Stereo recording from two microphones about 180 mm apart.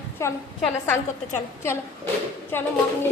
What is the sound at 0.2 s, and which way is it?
A woman's voice, 15° left (ahead or behind).